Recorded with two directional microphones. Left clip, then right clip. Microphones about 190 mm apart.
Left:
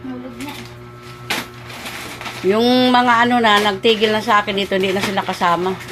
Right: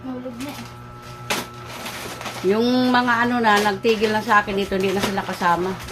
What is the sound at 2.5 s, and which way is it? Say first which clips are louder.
Speech: left 5 dB; 10° left (ahead or behind).